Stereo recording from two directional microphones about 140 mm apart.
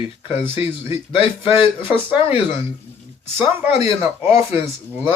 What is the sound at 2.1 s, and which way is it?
Speech, 35° left (ahead or behind).